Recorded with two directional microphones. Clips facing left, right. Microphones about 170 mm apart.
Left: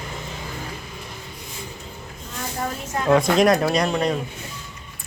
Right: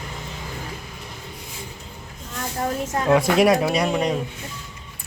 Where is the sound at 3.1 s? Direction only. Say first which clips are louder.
Even; 10° right (ahead or behind).